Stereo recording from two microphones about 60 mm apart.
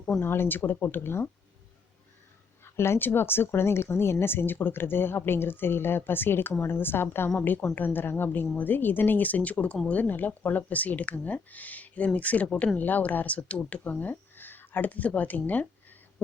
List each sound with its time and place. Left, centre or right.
0.2 s speech: left
2.6 s speech: left